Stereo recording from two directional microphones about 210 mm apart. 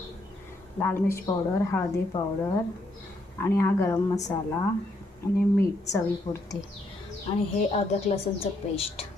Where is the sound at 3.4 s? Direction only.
15° left (ahead or behind).